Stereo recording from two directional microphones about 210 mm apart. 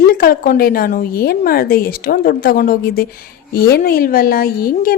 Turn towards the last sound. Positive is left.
turn(degrees=45)  # may be behind; listen again after turning